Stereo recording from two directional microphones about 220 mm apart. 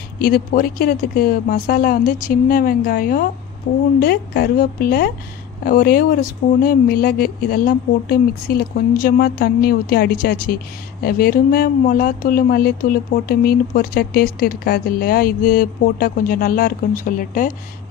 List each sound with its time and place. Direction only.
0.2 s speech: 45° left (ahead or behind)